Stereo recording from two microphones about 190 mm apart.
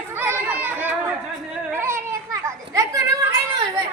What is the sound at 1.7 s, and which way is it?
Children playing, 15° right (ahead or behind).